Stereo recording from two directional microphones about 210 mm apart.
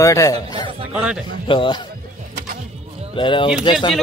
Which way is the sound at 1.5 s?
25° left (ahead or behind).